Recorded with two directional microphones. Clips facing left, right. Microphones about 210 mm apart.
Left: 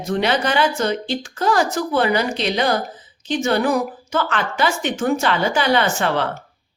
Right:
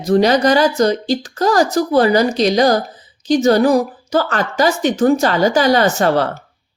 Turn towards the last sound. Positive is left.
turn(degrees=-40)  # may be behind; listen again after turning